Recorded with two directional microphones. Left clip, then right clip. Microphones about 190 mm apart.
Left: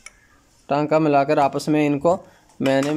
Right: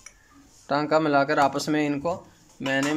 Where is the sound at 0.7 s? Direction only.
10° left (ahead or behind).